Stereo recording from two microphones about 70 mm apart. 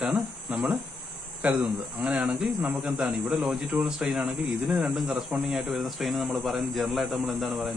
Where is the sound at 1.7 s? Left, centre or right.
Right.